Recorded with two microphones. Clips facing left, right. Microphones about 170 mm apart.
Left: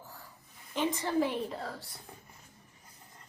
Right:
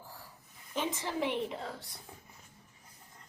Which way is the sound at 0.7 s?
Centre (ahead or behind).